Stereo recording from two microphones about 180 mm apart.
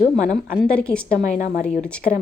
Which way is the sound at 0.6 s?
5° left (ahead or behind).